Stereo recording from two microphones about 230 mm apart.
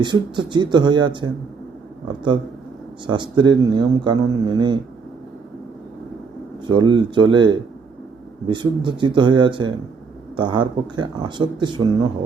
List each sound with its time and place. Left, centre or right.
0.0 s speech: centre
6.7 s speech: right